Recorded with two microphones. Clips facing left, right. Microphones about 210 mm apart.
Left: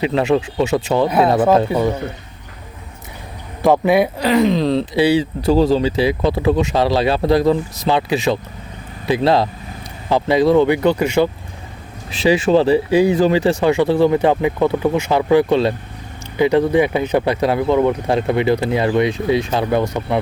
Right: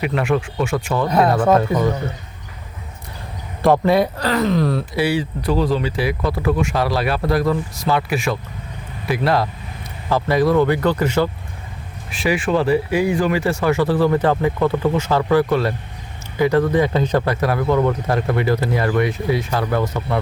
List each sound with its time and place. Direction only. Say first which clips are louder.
0.0 s speech: left 4 dB; 25° left (ahead or behind)
1.7 s speech: left 1 dB; 10° left (ahead or behind)
3.6 s speech: left 1 dB; centre (ahead or behind)
3.9 s speech: left 3 dB; 15° left (ahead or behind)
12.2 s speech: left 5 dB; 25° left (ahead or behind)